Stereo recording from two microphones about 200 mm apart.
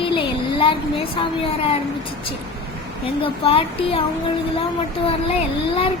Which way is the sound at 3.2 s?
25° left (ahead or behind).